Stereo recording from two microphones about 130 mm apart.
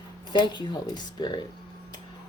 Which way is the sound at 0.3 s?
35° left (ahead or behind).